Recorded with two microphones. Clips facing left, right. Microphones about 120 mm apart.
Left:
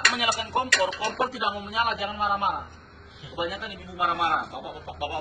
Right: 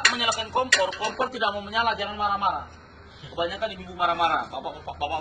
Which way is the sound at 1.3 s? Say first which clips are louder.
Right 2 dB; 90° right.